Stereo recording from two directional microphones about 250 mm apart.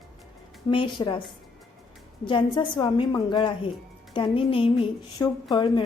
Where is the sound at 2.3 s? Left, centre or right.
Centre.